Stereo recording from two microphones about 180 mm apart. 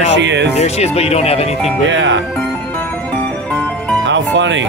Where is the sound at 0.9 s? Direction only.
35° left (ahead or behind).